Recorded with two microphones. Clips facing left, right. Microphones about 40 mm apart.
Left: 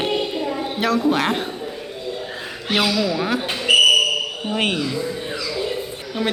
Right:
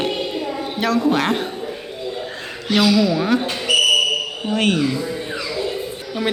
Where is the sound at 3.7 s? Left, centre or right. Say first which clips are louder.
Left 3 dB; left.